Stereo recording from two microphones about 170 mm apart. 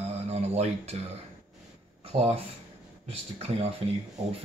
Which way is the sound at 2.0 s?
35° right (ahead or behind).